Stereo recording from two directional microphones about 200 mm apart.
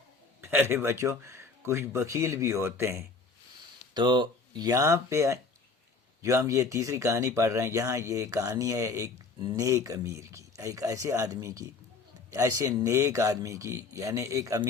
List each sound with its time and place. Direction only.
0.4 s speech: 10° right (ahead or behind)